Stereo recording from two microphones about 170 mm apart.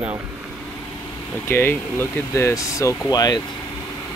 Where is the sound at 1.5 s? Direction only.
15° left (ahead or behind).